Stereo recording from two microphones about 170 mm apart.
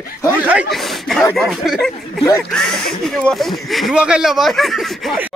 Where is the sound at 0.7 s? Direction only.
Centre (ahead or behind).